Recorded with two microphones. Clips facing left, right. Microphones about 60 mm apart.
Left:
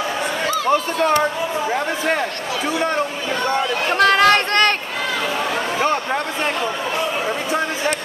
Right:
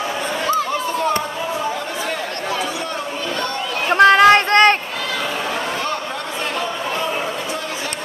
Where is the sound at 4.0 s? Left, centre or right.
Centre.